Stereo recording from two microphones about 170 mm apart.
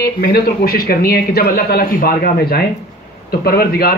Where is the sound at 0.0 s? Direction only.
60° left (ahead or behind).